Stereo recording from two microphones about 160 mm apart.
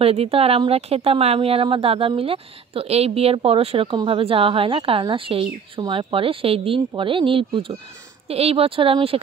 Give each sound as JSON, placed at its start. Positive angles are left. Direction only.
{"t": 0.0, "sound": "speech", "side_deg": -40}